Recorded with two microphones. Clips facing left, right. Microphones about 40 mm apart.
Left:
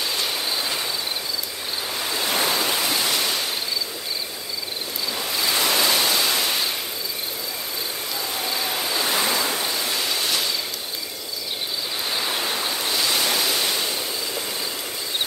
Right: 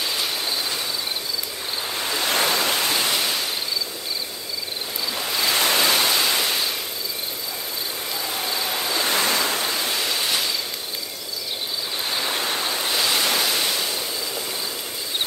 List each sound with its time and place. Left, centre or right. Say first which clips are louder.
0.0 s a sound: even; centre
2.2 s waves: right 1 dB; right
2.6 s waterfall: right 1 dB; right
3.0 s ocean: even; centre
5.1 s waves: right 1 dB; centre
5.7 s pink noise: even; centre
9.0 s waves: right 1 dB; right
9.3 s waves: right 1 dB; right
9.9 s waterfall: even; centre
13.1 s pink noise: right 1 dB; centre